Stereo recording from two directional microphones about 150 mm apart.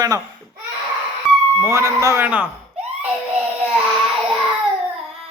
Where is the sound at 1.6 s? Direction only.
20° right (ahead or behind).